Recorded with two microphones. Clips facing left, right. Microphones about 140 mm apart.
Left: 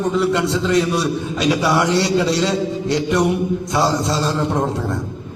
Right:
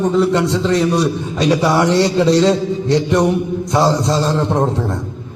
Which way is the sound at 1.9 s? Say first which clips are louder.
Right 4 dB; centre (ahead or behind).